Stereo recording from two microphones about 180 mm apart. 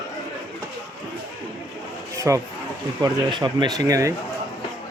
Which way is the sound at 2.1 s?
15° right (ahead or behind).